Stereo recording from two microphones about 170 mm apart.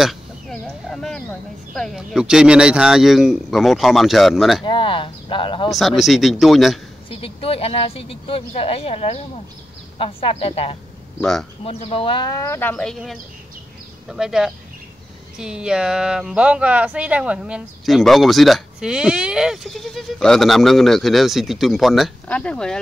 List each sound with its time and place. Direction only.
0.0 s a sound: centre (ahead or behind)
1.7 s speech: centre (ahead or behind)
4.6 s speech: 30° left (ahead or behind)
5.7 s speech: centre (ahead or behind)
7.1 s speech: 35° left (ahead or behind)
11.1 s a man's voice: 5° left (ahead or behind)
11.6 s speech: 35° left (ahead or behind); by 22.8 s 5° left (ahead or behind)